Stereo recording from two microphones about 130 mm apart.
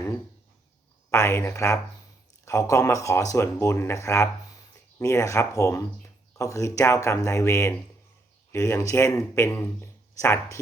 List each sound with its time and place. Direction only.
1.1 s speech: 20° left (ahead or behind)